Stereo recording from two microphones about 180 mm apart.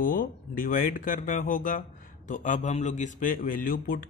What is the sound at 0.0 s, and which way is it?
Speech, 50° left (ahead or behind).